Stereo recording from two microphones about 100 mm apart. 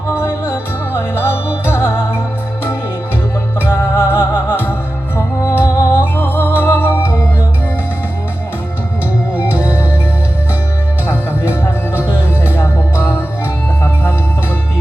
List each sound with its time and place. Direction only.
0.1 s music: 25° left (ahead or behind)
3.6 s music: 25° left (ahead or behind)
6.0 s music: 20° left (ahead or behind)
11.0 s music: 25° left (ahead or behind)